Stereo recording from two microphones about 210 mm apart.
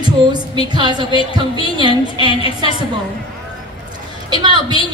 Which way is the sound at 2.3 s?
25° left (ahead or behind).